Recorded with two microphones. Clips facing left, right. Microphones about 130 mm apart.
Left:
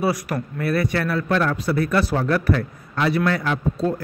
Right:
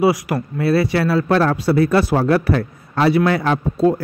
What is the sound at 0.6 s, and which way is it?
A man's voice, 30° right (ahead or behind).